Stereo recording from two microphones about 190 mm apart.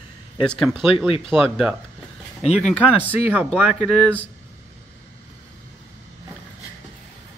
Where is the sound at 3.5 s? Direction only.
5° right (ahead or behind).